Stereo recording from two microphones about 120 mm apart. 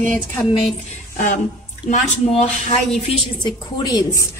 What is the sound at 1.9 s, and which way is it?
Speech, 70° left (ahead or behind).